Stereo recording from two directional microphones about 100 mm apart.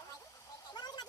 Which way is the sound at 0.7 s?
45° left (ahead or behind).